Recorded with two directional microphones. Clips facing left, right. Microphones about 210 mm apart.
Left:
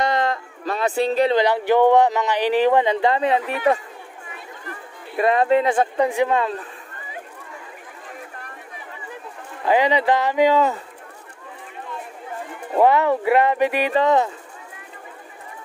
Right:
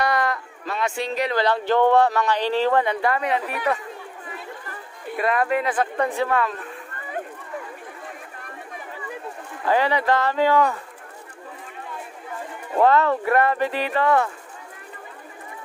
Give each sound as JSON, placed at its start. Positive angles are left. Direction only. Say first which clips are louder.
{"t": 0.0, "sound": "a sound", "louder": "left 2 dB", "side_deg": 25}
{"t": 1.3, "sound": "speech", "louder": "left 3 dB", "side_deg": 15}
{"t": 5.2, "sound": "speech", "louder": "left 5 dB", "side_deg": 25}
{"t": 5.9, "sound": "speech", "louder": "left 3 dB", "side_deg": 15}
{"t": 9.7, "sound": "speech", "louder": "left 3 dB", "side_deg": 15}
{"t": 12.7, "sound": "speech", "louder": "left 2 dB", "side_deg": 15}